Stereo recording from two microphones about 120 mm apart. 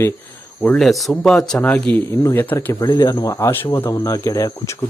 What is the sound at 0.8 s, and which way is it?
Speech, centre (ahead or behind).